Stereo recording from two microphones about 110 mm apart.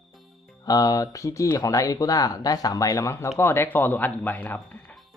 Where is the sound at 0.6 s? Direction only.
35° left (ahead or behind); by 5.0 s 15° left (ahead or behind).